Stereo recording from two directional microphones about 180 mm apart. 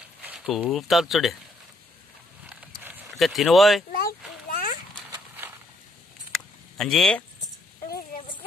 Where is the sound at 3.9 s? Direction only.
55° left (ahead or behind).